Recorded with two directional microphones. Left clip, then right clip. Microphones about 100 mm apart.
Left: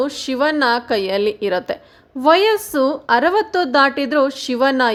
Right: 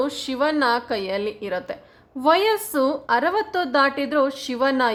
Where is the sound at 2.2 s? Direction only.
35° left (ahead or behind).